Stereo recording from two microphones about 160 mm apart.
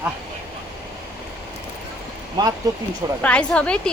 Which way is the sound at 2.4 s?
25° right (ahead or behind).